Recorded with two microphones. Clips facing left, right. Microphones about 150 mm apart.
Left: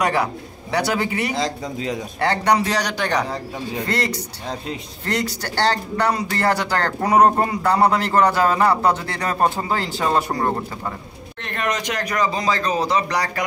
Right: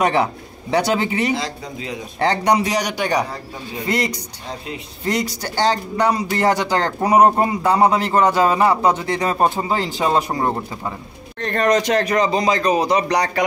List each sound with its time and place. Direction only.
0.0 s speech: 25° right (ahead or behind)
1.3 s speech: 5° right (ahead or behind)
2.1 s speech: 15° right (ahead or behind)
11.4 s speech: 35° right (ahead or behind); by 13.4 s 20° right (ahead or behind)